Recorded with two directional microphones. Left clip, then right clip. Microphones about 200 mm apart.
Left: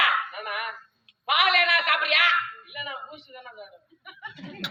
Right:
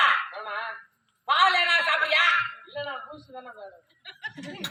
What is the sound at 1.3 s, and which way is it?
A man's voice, 15° right (ahead or behind).